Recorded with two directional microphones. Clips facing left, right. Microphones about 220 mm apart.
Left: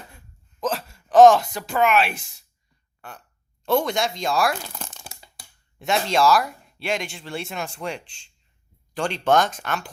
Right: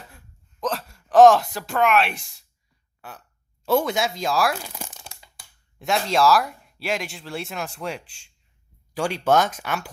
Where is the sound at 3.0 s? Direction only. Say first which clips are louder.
Even; 5° right (ahead or behind).